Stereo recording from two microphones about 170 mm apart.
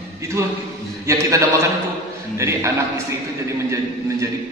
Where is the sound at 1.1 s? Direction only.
15° right (ahead or behind).